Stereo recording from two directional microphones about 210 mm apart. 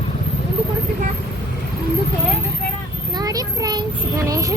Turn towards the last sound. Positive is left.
turn(degrees=-15)  # may be behind; listen again after turning